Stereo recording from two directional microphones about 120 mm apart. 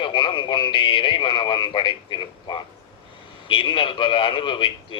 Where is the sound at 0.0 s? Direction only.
45° left (ahead or behind).